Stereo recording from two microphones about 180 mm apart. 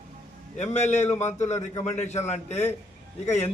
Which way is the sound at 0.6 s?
40° left (ahead or behind).